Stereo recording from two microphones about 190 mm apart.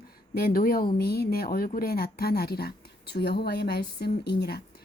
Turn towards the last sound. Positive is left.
turn(degrees=55)  # may be behind; listen again after turning